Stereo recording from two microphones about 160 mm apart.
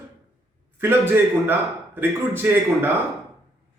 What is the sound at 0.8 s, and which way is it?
A man's voice, 15° right (ahead or behind).